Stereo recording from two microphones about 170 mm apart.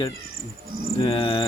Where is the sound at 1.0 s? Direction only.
30° left (ahead or behind).